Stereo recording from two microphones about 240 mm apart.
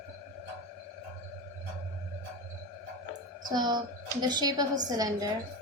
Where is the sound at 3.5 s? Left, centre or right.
Centre.